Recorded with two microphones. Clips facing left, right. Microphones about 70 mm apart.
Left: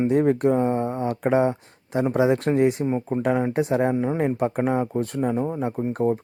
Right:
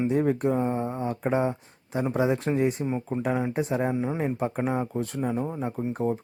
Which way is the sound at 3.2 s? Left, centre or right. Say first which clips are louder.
Left 5 dB; left.